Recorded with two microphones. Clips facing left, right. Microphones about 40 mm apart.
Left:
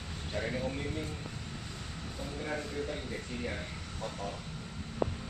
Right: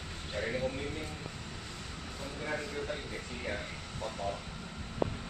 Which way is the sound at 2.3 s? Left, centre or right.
Centre.